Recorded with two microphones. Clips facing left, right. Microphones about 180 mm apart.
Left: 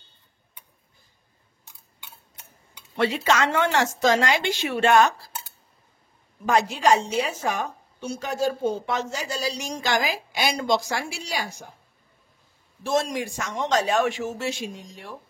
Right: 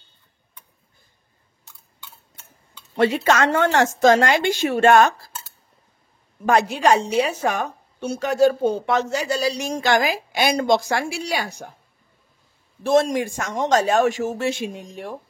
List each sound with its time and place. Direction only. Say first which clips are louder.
3.0 s a man's voice: right 4 dB; 50° right (ahead or behind)
6.4 s a woman's voice: right 3 dB; 60° right (ahead or behind)
12.8 s a man's voice: right 7 dB; 55° right (ahead or behind)